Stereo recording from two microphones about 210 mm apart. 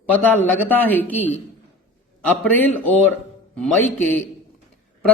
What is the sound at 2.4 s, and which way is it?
A woman's voice, 10° left (ahead or behind).